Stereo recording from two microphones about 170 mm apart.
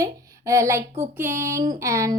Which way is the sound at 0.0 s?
15° right (ahead or behind).